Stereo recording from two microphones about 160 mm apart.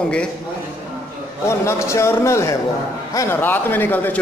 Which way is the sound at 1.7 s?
15° left (ahead or behind).